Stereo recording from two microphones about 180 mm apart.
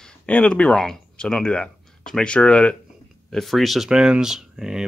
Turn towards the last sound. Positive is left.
turn(degrees=-5)  # may be behind; listen again after turning